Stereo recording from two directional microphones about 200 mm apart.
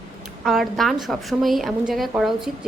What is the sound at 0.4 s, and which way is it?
Speech, centre (ahead or behind).